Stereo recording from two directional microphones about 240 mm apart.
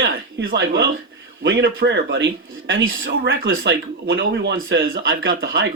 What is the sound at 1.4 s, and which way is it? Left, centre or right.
Speech, right.